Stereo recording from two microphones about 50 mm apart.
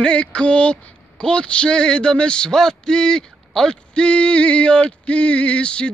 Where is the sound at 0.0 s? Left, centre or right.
Left.